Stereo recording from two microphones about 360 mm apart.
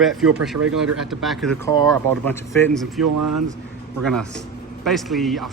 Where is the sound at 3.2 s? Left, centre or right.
Right.